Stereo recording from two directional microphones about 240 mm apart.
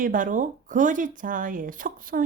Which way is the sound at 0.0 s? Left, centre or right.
Right.